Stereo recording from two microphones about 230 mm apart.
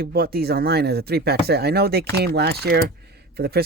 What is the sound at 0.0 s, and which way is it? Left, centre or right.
Speech, right.